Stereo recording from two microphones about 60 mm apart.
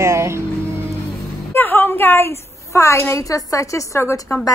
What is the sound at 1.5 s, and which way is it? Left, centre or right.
A woman's voice, left.